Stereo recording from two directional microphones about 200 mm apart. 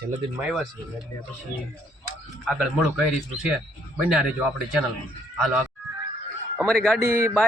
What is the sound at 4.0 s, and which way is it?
Speech, 5° right (ahead or behind).